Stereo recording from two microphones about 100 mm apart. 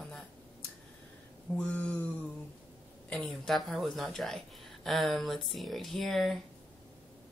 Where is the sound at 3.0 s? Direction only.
10° left (ahead or behind).